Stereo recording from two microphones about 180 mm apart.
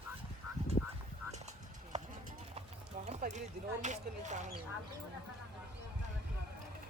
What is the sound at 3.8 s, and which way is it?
Speech, 40° right (ahead or behind).